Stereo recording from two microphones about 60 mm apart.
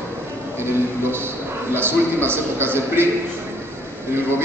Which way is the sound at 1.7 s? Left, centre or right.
Right.